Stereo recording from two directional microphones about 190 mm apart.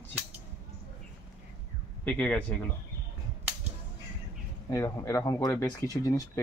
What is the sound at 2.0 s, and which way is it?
Speech, 5° left (ahead or behind).